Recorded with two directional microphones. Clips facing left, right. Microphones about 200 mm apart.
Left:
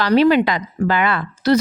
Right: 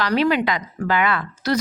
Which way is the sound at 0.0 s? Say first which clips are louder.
Left 6 dB; 30° left (ahead or behind).